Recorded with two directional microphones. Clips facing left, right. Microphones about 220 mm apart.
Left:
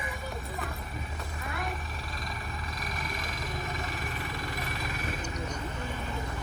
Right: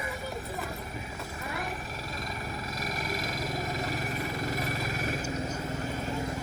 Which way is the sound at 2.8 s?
40° right (ahead or behind).